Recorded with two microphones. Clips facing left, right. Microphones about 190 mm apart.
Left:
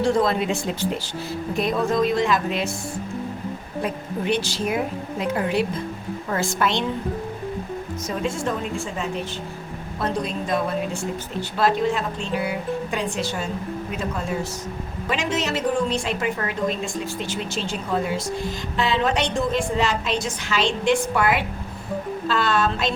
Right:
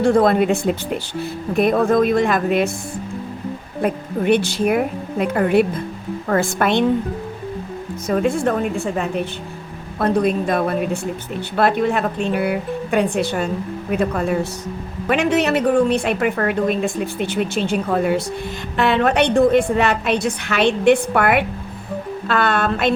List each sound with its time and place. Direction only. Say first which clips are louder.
0.0 s speech: right 6 dB; 55° right (ahead or behind)
3.8 s speech: right 7 dB; 55° right (ahead or behind)
8.0 s speech: right 8 dB; 55° right (ahead or behind)